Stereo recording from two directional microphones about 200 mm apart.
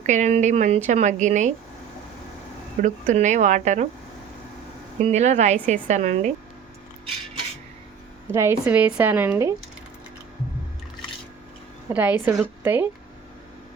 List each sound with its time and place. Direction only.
0.0 s speech: 35° right (ahead or behind)
2.8 s speech: 35° right (ahead or behind)
4.9 s speech: 30° right (ahead or behind)
8.3 s speech: 10° right (ahead or behind)
11.9 s speech: 10° right (ahead or behind)